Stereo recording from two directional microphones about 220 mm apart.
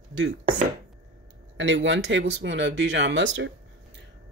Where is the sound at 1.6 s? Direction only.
55° right (ahead or behind).